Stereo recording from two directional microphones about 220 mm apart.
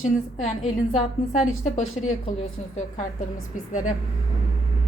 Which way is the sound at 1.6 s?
30° left (ahead or behind).